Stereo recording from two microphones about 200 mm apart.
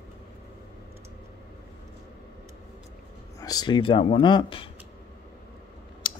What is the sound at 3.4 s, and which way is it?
Speech, 20° left (ahead or behind).